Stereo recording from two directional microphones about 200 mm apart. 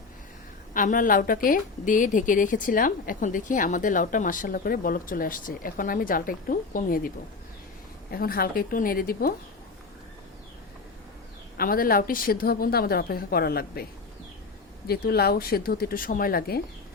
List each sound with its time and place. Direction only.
0.7 s a woman's voice: 40° left (ahead or behind)
8.1 s a woman's voice: 50° left (ahead or behind)
11.5 s a woman's voice: 45° left (ahead or behind)
14.8 s a woman's voice: 50° left (ahead or behind)